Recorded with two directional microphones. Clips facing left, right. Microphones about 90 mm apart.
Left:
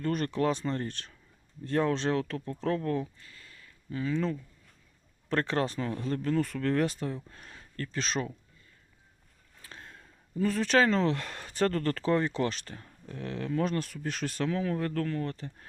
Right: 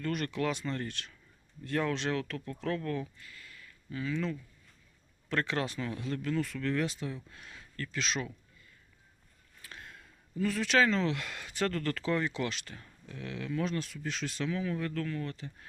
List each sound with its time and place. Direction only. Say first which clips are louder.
0.0 s speech: left 4 dB; 35° left (ahead or behind)
9.6 s speech: left 1 dB; 30° left (ahead or behind)